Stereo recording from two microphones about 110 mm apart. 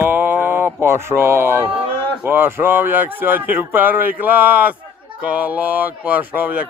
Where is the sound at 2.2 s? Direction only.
20° right (ahead or behind).